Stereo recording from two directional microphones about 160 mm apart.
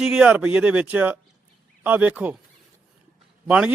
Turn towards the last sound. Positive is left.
turn(degrees=-5)  # may be behind; listen again after turning